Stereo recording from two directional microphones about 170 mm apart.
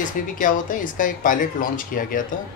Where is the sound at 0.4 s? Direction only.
50° left (ahead or behind).